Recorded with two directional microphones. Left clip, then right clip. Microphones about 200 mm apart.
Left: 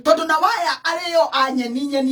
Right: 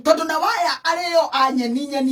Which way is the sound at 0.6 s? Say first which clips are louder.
Right 1 dB; 5° right (ahead or behind).